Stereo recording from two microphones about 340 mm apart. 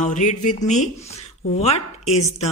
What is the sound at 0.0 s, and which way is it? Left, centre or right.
Speech, left.